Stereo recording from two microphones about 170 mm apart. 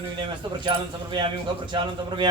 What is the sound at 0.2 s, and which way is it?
A man's voice, 30° right (ahead or behind).